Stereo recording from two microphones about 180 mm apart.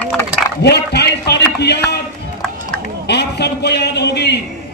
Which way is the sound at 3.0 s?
70° left (ahead or behind).